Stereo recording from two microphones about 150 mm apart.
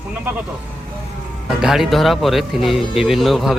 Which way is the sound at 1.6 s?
Centre (ahead or behind).